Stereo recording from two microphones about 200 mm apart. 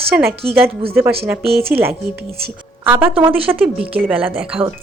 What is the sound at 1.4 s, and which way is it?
Speech, 50° right (ahead or behind).